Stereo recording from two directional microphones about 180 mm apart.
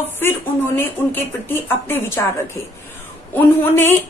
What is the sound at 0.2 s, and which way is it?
Speech, 10° left (ahead or behind).